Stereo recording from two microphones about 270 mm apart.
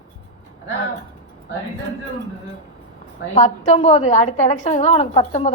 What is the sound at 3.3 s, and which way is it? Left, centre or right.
A woman's voice, left.